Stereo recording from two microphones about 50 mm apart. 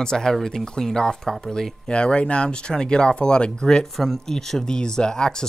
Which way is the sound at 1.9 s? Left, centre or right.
Left.